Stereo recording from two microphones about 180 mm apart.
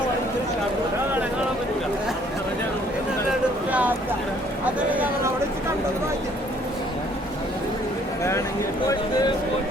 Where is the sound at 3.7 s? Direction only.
10° right (ahead or behind).